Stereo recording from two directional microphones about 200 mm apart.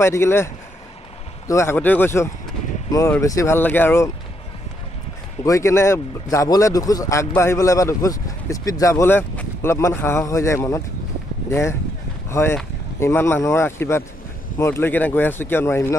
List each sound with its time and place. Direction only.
0.0 s a man's voice: 15° left (ahead or behind)
1.5 s a man's voice: 15° left (ahead or behind)
5.4 s a man's voice: 15° left (ahead or behind)